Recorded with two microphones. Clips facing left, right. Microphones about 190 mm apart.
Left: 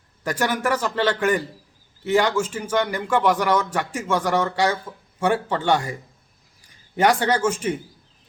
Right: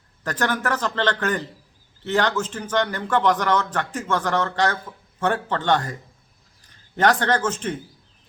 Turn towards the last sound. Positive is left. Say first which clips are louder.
# left 2 dB
turn(degrees=10)  # may be behind; listen again after turning